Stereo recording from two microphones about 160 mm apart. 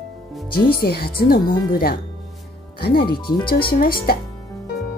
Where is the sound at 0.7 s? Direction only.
75° left (ahead or behind).